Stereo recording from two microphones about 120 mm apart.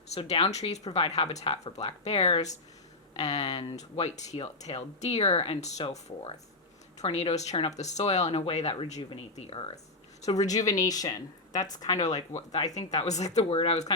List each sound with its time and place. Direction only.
0.1 s speech: 55° left (ahead or behind)
7.7 s speech: 70° left (ahead or behind)
8.3 s speech: 60° left (ahead or behind)
10.5 s speech: 30° left (ahead or behind)
12.3 s speech: 65° left (ahead or behind)
12.6 s speech: 30° left (ahead or behind)
12.9 s speech: 70° left (ahead or behind)
13.3 s speech: 55° left (ahead or behind)